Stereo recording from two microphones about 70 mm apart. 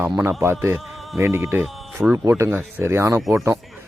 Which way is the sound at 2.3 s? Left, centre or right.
Right.